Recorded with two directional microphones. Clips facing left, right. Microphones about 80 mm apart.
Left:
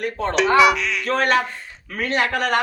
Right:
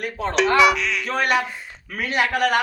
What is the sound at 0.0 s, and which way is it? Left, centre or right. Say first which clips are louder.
Speech: left 1 dB; centre.